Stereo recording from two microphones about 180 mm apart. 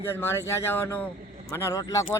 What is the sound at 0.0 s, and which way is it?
A man's voice, 15° left (ahead or behind).